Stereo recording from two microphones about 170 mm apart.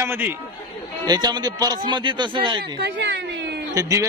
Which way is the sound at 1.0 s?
25° right (ahead or behind).